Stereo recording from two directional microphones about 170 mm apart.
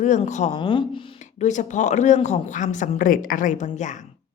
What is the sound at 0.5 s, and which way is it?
Speech, 30° left (ahead or behind).